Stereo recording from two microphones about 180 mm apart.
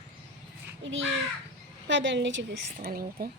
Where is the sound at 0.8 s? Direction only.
90° right.